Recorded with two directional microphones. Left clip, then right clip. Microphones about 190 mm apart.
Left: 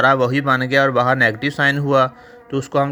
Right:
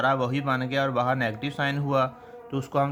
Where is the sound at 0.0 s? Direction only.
30° left (ahead or behind).